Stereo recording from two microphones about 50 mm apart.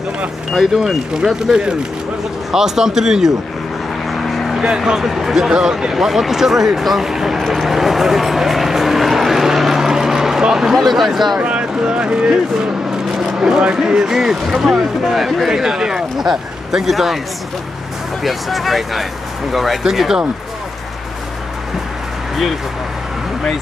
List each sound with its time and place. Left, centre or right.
0.6 s speech: centre
4.1 s vehicle: centre
4.6 s speech: centre
11.3 s speech: right; by 17.2 s centre
18.2 s speech: centre